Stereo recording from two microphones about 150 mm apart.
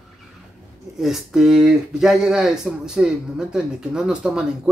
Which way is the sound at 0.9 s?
Centre (ahead or behind).